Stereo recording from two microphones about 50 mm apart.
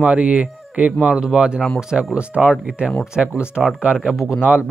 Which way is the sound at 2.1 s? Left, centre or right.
Right.